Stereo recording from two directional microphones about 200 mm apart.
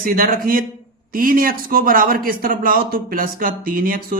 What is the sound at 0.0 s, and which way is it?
A man's voice, 45° right (ahead or behind).